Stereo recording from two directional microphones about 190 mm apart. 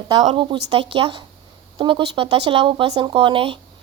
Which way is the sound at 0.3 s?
25° right (ahead or behind).